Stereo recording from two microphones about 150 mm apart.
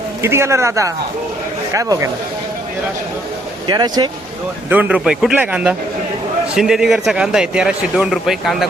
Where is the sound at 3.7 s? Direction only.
25° right (ahead or behind).